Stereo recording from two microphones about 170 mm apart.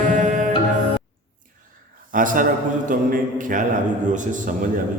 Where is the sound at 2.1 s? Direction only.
50° right (ahead or behind).